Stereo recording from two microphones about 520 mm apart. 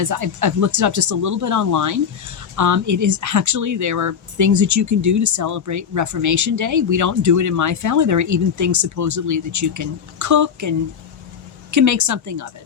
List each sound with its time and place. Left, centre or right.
0.0 s speech: right